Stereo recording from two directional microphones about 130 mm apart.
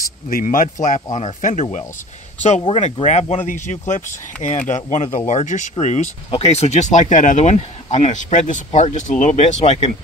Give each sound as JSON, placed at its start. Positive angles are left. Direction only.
{"t": 0.3, "sound": "a man's voice", "side_deg": 90}
{"t": 1.1, "sound": "speech", "side_deg": 65}